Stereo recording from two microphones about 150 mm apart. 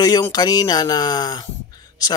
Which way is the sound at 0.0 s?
25° left (ahead or behind).